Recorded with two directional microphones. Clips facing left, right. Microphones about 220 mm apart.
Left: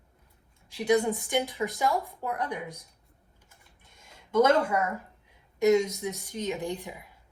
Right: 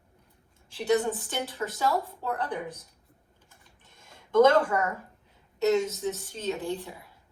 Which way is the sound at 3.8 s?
10° left (ahead or behind).